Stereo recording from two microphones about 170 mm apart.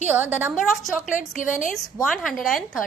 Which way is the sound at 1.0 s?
50° left (ahead or behind).